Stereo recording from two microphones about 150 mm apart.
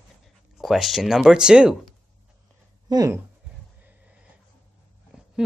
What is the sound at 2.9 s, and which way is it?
Speech, 25° right (ahead or behind).